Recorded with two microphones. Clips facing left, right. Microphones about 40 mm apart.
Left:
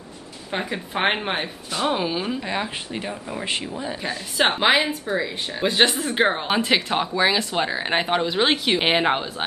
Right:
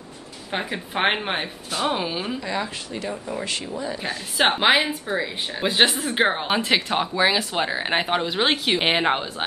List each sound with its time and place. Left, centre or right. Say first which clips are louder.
0.5 s speech: left 1 dB; centre
2.4 s speech: left 1 dB; left
3.1 s speech: right 1 dB; centre
4.0 s speech: even; centre